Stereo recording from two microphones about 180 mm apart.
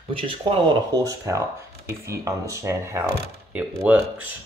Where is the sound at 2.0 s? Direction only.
15° right (ahead or behind).